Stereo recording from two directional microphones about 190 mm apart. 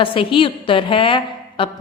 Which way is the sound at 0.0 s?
25° left (ahead or behind).